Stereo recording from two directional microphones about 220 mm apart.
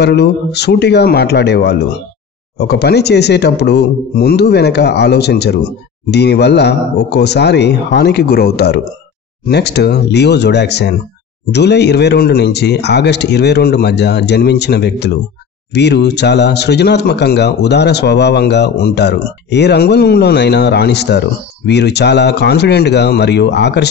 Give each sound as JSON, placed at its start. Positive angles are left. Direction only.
{"t": 0.0, "sound": "speech", "side_deg": 50}